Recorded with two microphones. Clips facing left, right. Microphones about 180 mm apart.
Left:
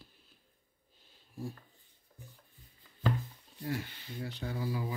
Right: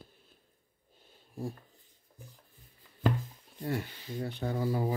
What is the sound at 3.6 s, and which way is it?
Speech, 55° right (ahead or behind).